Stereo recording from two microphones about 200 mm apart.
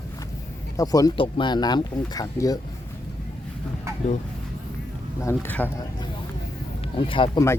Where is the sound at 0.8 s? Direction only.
15° left (ahead or behind).